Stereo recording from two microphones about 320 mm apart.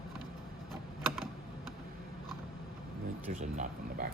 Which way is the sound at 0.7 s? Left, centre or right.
Centre.